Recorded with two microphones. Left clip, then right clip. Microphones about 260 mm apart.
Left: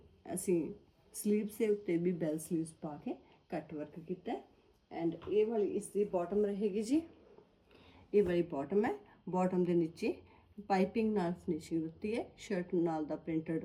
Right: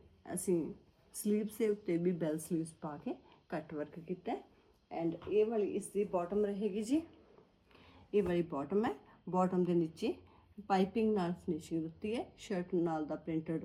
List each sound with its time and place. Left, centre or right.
0.3 s speech: centre
4.9 s speech: centre
8.1 s speech: centre